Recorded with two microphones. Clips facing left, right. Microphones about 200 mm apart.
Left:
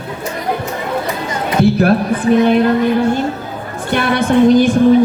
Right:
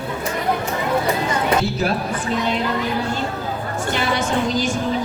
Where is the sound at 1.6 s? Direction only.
60° left (ahead or behind).